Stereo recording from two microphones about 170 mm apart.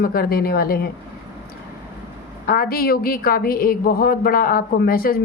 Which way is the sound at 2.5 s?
60° left (ahead or behind).